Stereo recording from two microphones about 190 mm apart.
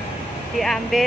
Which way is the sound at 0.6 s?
Centre (ahead or behind).